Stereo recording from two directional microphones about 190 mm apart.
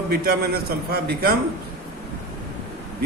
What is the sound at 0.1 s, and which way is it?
A man's voice, 55° right (ahead or behind).